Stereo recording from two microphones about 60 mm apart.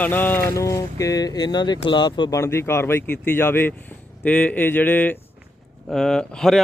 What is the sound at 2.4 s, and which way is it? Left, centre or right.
Speech, left.